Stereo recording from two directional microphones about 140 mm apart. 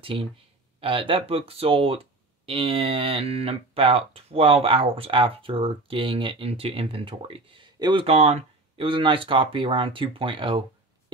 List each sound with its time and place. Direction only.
0.0 s speech: 40° right (ahead or behind)